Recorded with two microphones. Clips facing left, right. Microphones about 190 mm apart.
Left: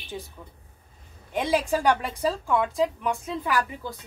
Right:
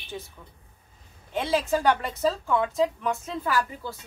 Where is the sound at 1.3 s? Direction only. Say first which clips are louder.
Left 1 dB; 15° left (ahead or behind).